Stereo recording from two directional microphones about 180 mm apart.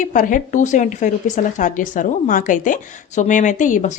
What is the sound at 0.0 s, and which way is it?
Speech, 45° left (ahead or behind).